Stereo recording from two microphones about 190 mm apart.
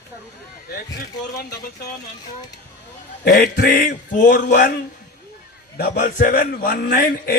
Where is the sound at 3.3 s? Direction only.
50° left (ahead or behind).